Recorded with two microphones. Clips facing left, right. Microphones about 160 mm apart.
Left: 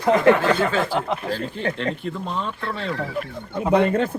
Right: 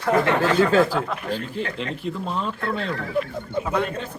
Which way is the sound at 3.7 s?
70° left (ahead or behind).